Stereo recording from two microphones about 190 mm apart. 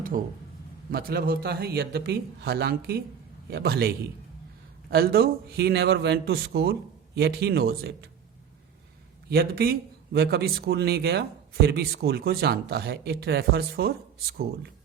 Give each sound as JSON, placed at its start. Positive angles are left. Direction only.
{"t": 0.2, "sound": "a man's voice", "side_deg": -45}
{"t": 9.3, "sound": "speech", "side_deg": -55}